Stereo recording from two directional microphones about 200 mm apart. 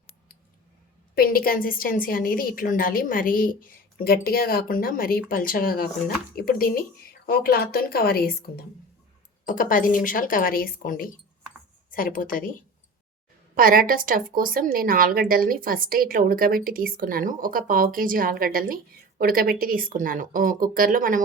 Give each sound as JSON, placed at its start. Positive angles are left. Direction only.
{"t": 1.1, "sound": "a woman's voice", "side_deg": 50}
{"t": 13.6, "sound": "speech", "side_deg": -45}